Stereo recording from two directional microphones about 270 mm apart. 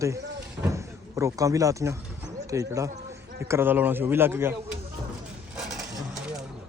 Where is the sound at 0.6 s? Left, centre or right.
Centre.